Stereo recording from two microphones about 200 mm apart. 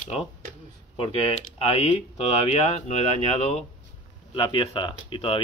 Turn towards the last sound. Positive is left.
turn(degrees=25)  # may be behind; listen again after turning